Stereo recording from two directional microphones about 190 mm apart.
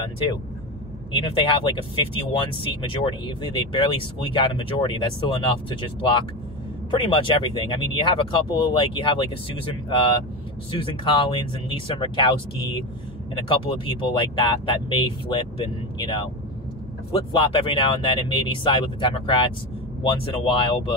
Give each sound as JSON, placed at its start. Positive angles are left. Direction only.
{"t": 1.1, "sound": "speech", "side_deg": 30}